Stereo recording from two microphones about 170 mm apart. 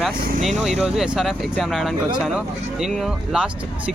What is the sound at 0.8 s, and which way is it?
Speech, 5° right (ahead or behind).